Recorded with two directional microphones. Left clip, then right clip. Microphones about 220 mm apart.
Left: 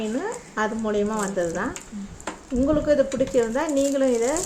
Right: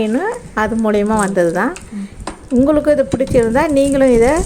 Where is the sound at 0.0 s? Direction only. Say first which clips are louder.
Right 10 dB; 40° right (ahead or behind).